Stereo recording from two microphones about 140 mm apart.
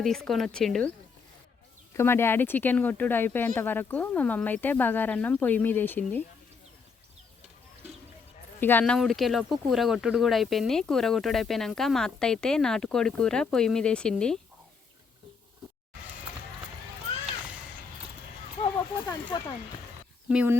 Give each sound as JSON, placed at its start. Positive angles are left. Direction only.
{"t": 0.0, "sound": "speech", "side_deg": 0}
{"t": 1.9, "sound": "speech", "side_deg": 15}
{"t": 8.8, "sound": "speech", "side_deg": 0}
{"t": 19.3, "sound": "speech", "side_deg": 30}
{"t": 20.3, "sound": "speech", "side_deg": -10}